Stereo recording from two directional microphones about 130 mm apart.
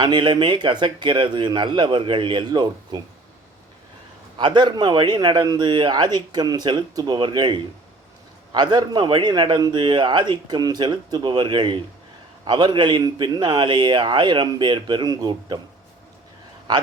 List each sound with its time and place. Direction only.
0.0 s speech: 35° right (ahead or behind)
4.4 s speech: 35° right (ahead or behind)